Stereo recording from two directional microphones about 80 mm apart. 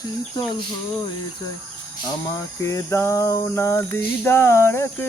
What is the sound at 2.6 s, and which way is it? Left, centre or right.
Cricket, left.